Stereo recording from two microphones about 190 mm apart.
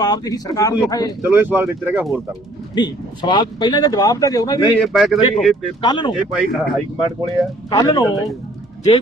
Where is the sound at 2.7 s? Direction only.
25° left (ahead or behind).